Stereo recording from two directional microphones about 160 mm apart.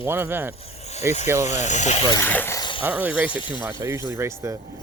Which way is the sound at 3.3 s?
30° left (ahead or behind).